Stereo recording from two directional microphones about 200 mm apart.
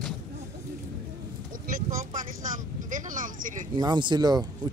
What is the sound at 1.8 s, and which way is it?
Vehicle, 40° right (ahead or behind).